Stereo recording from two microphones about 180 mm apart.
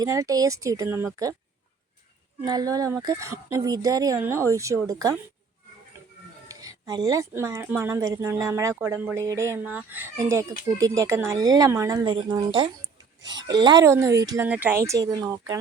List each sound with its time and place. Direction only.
0.0 s speech: 20° right (ahead or behind)
2.4 s speech: 20° right (ahead or behind)
6.5 s speech: 20° right (ahead or behind)